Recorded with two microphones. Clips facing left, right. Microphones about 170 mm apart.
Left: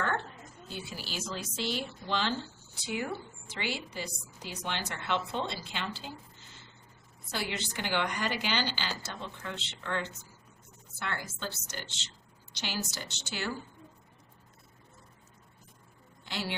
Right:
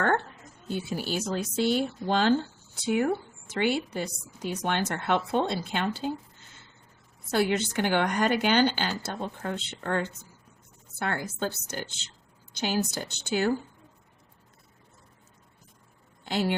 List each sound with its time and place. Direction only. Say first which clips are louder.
0.7 s speech: right 11 dB; 50° right (ahead or behind)
7.3 s speech: right 11 dB; 50° right (ahead or behind)
16.2 s speech: right 9 dB; 50° right (ahead or behind)